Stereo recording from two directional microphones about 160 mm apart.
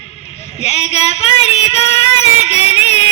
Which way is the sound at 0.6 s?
40° left (ahead or behind).